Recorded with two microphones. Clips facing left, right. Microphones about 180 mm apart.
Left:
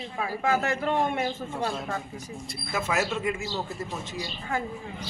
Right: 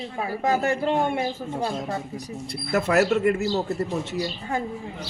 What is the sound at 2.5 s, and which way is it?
Speech, 65° right (ahead or behind).